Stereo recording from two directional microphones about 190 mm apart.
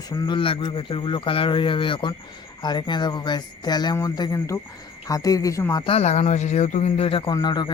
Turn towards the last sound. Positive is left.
turn(degrees=25)  # may be behind; listen again after turning